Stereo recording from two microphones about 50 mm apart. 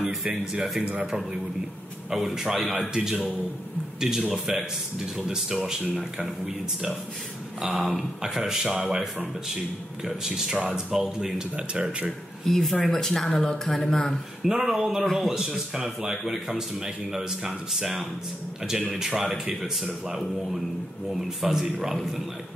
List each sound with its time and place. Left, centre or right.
2.0 s a man's voice: centre
11.5 s speech: right
12.4 s a man's voice: centre
14.4 s a man's voice: centre